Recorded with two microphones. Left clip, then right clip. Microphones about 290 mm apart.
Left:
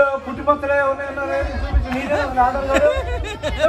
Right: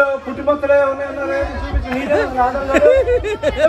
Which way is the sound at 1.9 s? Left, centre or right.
Centre.